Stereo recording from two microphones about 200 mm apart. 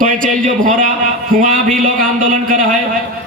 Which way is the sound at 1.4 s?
45° right (ahead or behind).